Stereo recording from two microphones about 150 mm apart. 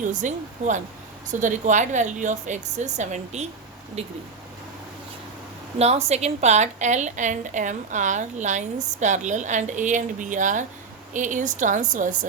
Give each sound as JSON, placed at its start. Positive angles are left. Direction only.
{"t": 0.0, "sound": "a woman's voice", "side_deg": -55}
{"t": 5.8, "sound": "a woman's voice", "side_deg": -45}